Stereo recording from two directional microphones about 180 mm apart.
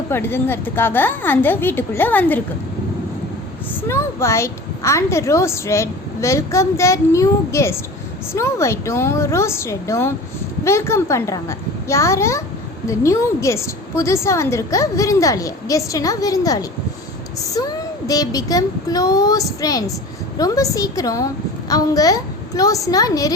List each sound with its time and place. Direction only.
0.1 s a child's voice: 10° left (ahead or behind)
3.8 s a child's voice: 15° left (ahead or behind)
18.1 s speech: 20° left (ahead or behind)